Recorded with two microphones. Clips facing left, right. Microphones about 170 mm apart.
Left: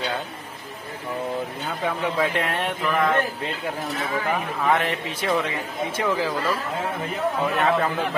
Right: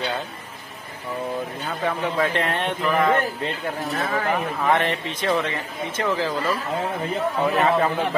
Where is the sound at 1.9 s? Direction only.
5° left (ahead or behind).